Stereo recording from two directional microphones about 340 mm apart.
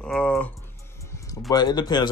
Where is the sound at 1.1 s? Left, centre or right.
Centre.